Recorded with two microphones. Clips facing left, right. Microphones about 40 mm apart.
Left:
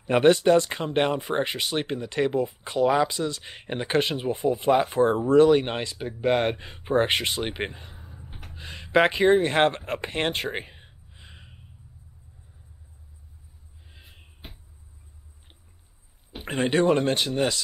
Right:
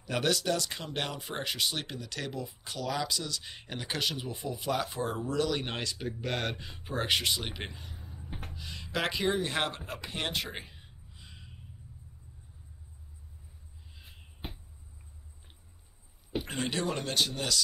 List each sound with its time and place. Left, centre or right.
0.0 s speech: left
8.3 s a sound: right
8.5 s speech: left
16.3 s speech: left